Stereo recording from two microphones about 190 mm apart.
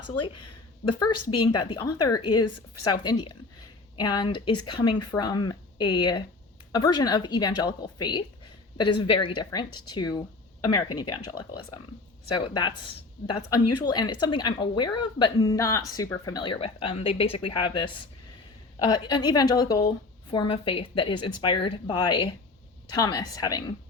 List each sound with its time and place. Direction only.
0.9 s speech: 25° left (ahead or behind)